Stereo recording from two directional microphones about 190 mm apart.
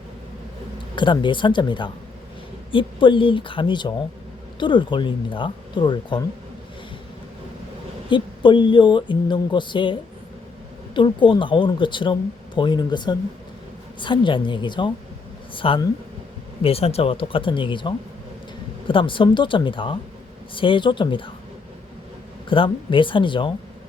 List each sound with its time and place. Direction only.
0.9 s speech: 25° left (ahead or behind)
8.1 s speech: 25° left (ahead or behind)
22.4 s speech: 25° left (ahead or behind)